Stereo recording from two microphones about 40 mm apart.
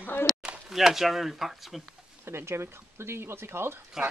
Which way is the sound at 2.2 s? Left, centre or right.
Right.